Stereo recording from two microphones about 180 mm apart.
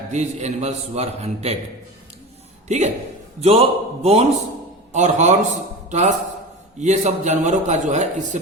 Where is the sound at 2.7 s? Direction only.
40° right (ahead or behind).